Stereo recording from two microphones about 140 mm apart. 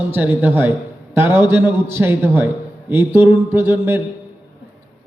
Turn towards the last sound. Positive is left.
turn(degrees=-15)  # may be behind; listen again after turning